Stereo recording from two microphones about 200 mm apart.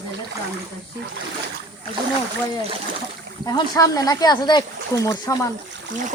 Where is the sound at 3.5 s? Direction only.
15° left (ahead or behind).